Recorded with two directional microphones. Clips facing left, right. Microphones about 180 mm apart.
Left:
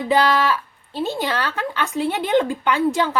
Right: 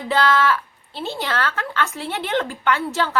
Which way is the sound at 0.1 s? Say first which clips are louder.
Left 1 dB; 15° left (ahead or behind).